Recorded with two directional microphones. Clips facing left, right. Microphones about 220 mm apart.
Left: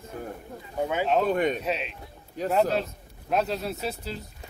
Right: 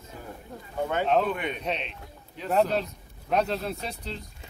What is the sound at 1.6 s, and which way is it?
A man's voice, 5° left (ahead or behind).